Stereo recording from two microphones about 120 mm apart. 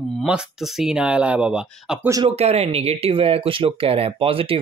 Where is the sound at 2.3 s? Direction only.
60° right (ahead or behind).